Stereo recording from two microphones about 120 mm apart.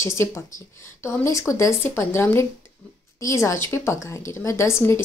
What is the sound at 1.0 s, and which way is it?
A woman's voice, 25° left (ahead or behind).